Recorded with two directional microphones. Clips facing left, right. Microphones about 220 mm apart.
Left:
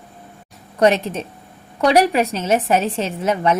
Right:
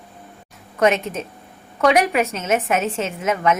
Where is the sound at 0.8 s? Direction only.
35° left (ahead or behind).